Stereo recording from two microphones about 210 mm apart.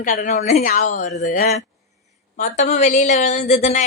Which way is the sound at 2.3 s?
35° left (ahead or behind).